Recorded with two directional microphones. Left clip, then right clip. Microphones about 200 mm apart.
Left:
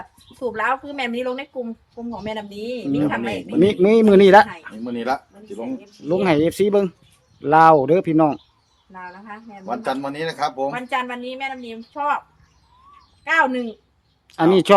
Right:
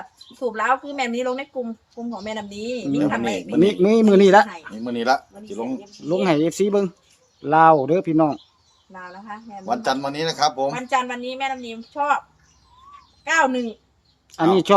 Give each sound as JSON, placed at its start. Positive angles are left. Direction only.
{"t": 0.3, "sound": "speech", "side_deg": 5}
{"t": 4.8, "sound": "speech", "side_deg": -50}
{"t": 6.1, "sound": "speech", "side_deg": 15}
{"t": 8.9, "sound": "a woman's voice", "side_deg": 0}
{"t": 9.6, "sound": "speech", "side_deg": -50}
{"t": 10.7, "sound": "a woman's voice", "side_deg": 5}
{"t": 13.2, "sound": "a woman's voice", "side_deg": 0}
{"t": 14.3, "sound": "speech", "side_deg": 20}